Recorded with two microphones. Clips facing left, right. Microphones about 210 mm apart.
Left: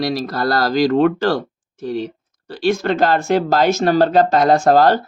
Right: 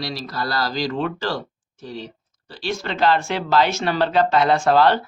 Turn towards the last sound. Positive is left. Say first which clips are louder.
# left 4 dB
turn(degrees=45)  # may be behind; listen again after turning